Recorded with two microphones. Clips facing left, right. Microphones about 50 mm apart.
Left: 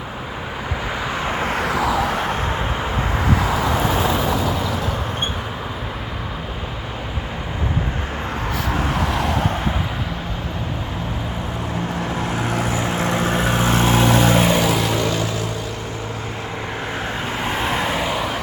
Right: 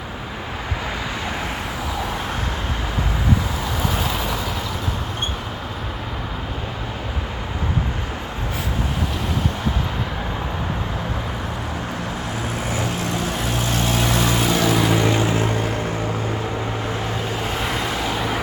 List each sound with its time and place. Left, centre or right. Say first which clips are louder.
1.2 s vehicle: left 4 dB; left
1.5 s a sound: left 7 dB; left
13.0 s vehicle: left 4 dB; left
14.5 s vehicle: even; centre
15.0 s vehicle: right 3 dB; right